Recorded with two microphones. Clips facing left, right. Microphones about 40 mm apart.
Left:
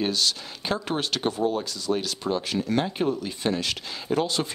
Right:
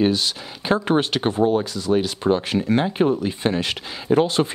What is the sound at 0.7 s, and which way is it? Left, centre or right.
Speech, right.